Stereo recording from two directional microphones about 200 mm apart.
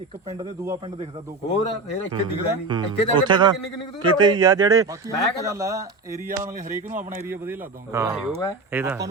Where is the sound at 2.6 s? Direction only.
25° right (ahead or behind).